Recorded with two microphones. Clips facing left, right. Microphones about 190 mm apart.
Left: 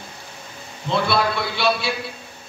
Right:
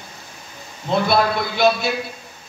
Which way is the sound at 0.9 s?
45° right (ahead or behind).